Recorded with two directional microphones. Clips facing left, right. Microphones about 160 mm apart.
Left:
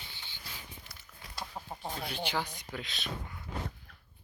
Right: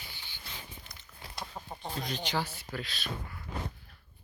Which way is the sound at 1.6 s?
5° left (ahead or behind).